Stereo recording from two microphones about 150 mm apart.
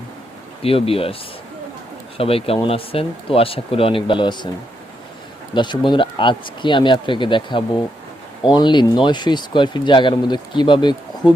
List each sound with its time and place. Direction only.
0.6 s speech: 40° left (ahead or behind)
2.1 s speech: 40° left (ahead or behind)
5.5 s speech: 30° left (ahead or behind)